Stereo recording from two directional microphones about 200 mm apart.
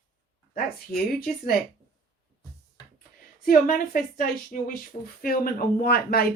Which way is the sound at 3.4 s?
45° left (ahead or behind).